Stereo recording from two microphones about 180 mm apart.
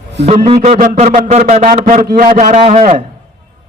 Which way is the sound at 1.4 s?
50° right (ahead or behind).